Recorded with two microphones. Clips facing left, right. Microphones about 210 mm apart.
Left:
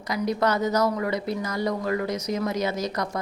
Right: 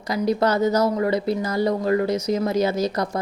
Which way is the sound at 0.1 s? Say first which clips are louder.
Right 4 dB; 30° right (ahead or behind).